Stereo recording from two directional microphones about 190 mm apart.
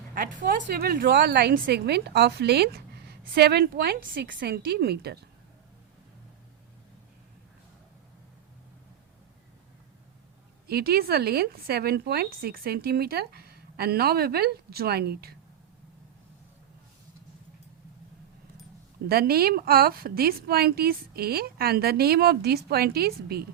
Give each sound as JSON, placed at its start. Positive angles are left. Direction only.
{"t": 0.1, "sound": "a woman's voice", "side_deg": -45}
{"t": 10.7, "sound": "a woman's voice", "side_deg": -55}
{"t": 19.0, "sound": "a woman's voice", "side_deg": -55}